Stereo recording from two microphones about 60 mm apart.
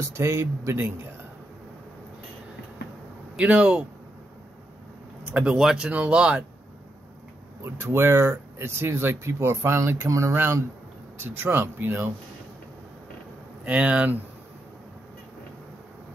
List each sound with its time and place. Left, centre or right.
0.0 s speech: right
3.3 s speech: right
5.4 s speech: centre
5.9 s speech: right
7.6 s speech: right
10.3 s speech: right
13.7 s speech: right